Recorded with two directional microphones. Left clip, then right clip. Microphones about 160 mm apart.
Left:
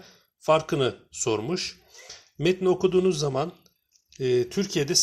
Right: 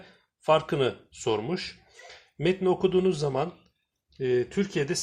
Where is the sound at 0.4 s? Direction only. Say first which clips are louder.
Left 1 dB; 30° left (ahead or behind).